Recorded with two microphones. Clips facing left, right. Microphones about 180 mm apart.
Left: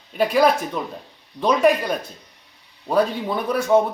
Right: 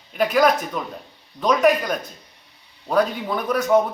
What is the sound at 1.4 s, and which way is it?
Speech, 25° left (ahead or behind).